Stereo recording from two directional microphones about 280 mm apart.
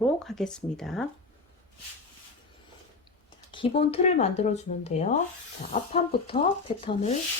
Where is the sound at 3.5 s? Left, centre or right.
Centre.